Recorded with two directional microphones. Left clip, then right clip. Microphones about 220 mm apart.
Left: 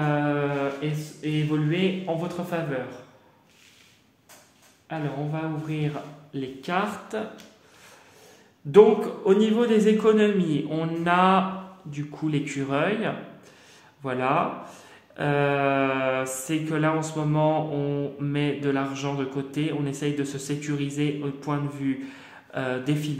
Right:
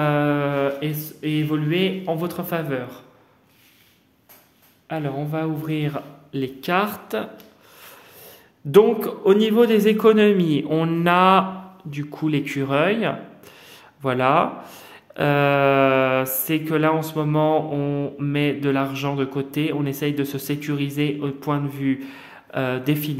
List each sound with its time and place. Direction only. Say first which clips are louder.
0.0 s mantra: right 5 dB; 45° right (ahead or behind)
4.8 s a man's voice: right 4 dB; 50° right (ahead or behind)
8.7 s speech: right 1 dB; 45° right (ahead or behind)